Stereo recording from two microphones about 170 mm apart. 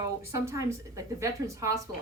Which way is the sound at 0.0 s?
15° right (ahead or behind).